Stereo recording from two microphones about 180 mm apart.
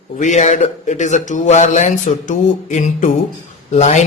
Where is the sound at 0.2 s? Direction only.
40° left (ahead or behind).